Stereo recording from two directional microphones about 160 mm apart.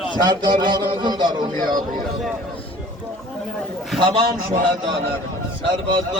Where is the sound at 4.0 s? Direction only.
30° right (ahead or behind).